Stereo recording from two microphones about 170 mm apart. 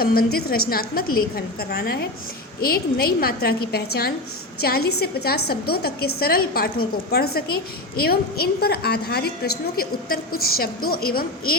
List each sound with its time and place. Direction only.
0.0 s a woman's voice: 60° left (ahead or behind)